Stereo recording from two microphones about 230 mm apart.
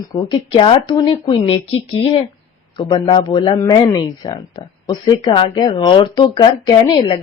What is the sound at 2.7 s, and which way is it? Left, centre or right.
A man's voice, centre.